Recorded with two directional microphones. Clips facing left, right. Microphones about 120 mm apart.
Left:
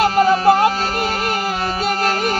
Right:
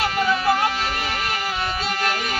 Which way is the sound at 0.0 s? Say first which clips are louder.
Left 8 dB; 40° left (ahead or behind).